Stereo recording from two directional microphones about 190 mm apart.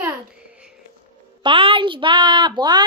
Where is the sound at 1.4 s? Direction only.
25° right (ahead or behind).